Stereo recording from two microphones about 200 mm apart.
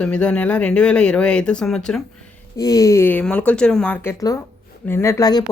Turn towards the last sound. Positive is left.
turn(degrees=20)  # may be behind; listen again after turning